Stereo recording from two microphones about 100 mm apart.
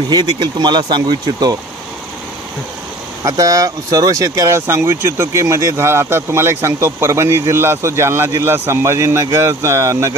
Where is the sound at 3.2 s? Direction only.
35° right (ahead or behind).